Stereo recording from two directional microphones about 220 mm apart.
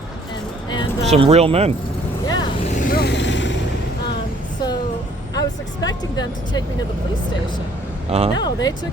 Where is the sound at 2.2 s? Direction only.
20° left (ahead or behind).